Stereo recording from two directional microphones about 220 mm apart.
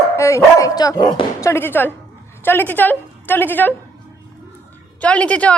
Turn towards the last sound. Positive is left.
turn(degrees=5)  # may be behind; listen again after turning